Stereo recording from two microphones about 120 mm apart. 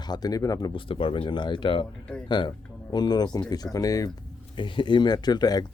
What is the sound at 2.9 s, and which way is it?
Speech, 35° left (ahead or behind).